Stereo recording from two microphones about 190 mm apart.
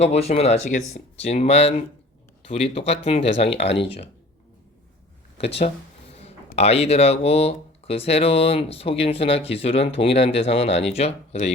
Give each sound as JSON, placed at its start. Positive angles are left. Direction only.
{"t": 0.0, "sound": "speech", "side_deg": 35}
{"t": 6.6, "sound": "speech", "side_deg": 35}